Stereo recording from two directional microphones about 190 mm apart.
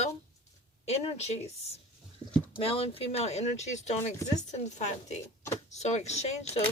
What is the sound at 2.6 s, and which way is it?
Speech, 30° left (ahead or behind).